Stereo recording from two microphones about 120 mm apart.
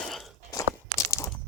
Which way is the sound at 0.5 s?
25° left (ahead or behind).